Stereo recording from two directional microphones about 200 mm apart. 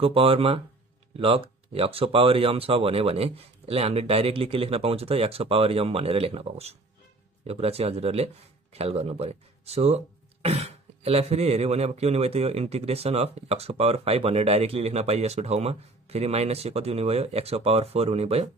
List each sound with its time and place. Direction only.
0.0 s speech: 30° right (ahead or behind)